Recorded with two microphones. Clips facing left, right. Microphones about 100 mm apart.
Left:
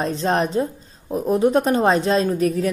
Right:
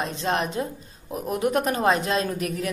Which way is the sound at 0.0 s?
35° left (ahead or behind).